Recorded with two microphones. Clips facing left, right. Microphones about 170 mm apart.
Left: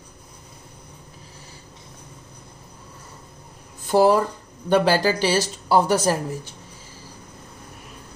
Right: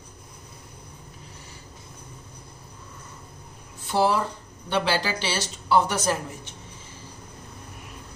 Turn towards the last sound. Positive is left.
turn(degrees=40)  # may be behind; listen again after turning